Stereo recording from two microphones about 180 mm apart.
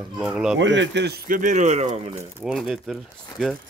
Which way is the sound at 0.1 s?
5° right (ahead or behind).